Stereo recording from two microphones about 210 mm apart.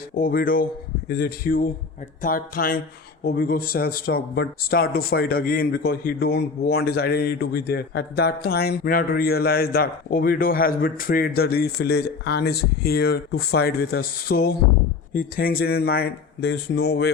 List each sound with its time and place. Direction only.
0.2 s speech: 45° left (ahead or behind)